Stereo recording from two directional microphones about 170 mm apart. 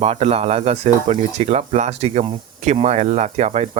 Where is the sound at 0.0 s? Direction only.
40° right (ahead or behind).